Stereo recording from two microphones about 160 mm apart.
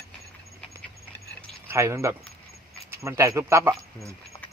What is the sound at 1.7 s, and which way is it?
Speech, 15° right (ahead or behind).